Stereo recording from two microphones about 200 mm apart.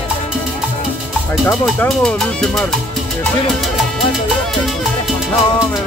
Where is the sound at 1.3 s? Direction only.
Centre (ahead or behind).